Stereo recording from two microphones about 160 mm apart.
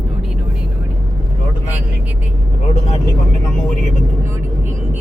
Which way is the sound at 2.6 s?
45° left (ahead or behind).